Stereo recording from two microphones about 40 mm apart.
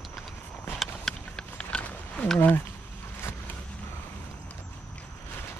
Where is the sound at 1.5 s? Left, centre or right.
Left.